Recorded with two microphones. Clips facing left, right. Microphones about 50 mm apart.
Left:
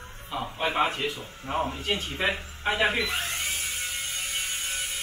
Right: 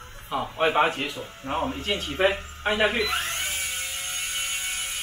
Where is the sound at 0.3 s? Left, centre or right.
Right.